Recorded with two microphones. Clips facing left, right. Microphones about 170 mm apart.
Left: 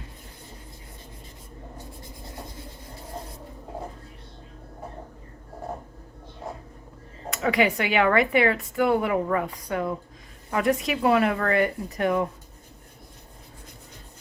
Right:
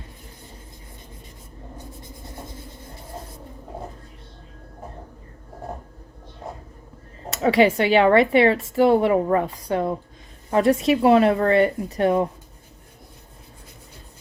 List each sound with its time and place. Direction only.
7.4 s a woman's voice: 30° right (ahead or behind)